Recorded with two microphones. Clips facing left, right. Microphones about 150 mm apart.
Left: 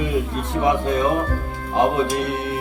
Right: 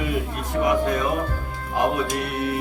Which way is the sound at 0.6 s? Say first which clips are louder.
Left 2 dB; 25° left (ahead or behind).